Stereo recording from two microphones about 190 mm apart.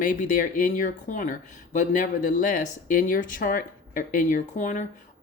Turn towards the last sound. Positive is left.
turn(degrees=40)  # may be behind; listen again after turning